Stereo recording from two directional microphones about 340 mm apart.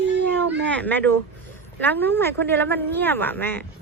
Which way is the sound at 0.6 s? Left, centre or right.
Centre.